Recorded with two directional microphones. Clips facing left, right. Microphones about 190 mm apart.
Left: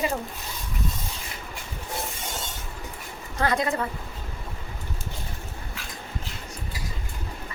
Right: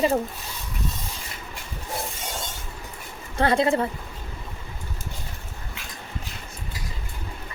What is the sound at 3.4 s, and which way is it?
Speech, 30° right (ahead or behind).